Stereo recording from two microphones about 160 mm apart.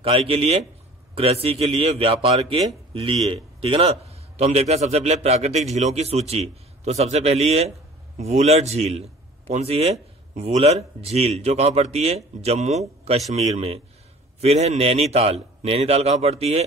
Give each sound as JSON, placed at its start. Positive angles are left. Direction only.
{"t": 0.0, "sound": "a man's voice", "side_deg": -35}